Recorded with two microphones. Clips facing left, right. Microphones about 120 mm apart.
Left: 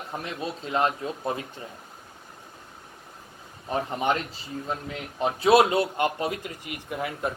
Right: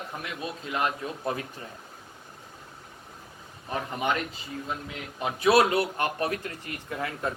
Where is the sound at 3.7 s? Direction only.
30° left (ahead or behind).